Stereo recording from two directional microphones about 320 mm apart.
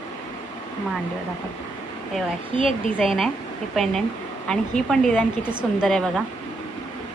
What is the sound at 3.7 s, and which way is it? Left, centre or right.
A woman's voice, centre.